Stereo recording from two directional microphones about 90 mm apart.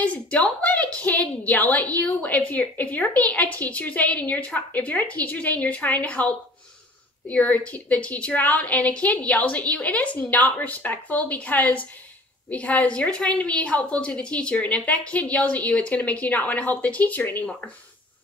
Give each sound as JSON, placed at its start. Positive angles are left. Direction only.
{"t": 0.0, "sound": "a woman's voice", "side_deg": 15}